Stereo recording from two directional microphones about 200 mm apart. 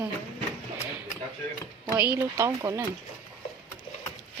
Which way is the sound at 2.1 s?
15° right (ahead or behind).